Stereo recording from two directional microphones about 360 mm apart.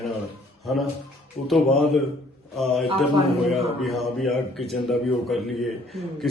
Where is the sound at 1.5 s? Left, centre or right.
Centre.